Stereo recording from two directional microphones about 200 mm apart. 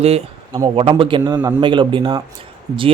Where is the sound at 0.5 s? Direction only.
25° right (ahead or behind).